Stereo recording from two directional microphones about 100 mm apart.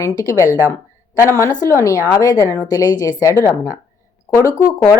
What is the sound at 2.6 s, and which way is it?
Speech, 40° left (ahead or behind).